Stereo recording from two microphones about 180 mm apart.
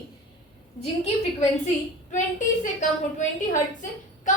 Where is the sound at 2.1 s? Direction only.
45° left (ahead or behind).